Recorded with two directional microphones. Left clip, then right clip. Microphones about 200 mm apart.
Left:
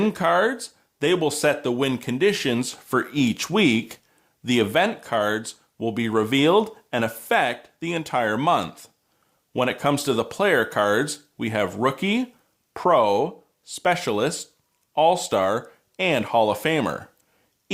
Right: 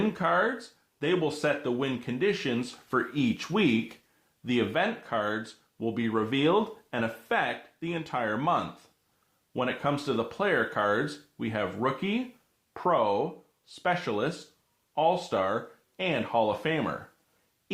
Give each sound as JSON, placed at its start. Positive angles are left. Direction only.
{"t": 0.0, "sound": "speech", "side_deg": 45}